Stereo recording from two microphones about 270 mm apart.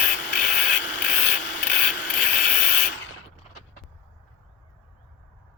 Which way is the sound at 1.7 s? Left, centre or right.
Left.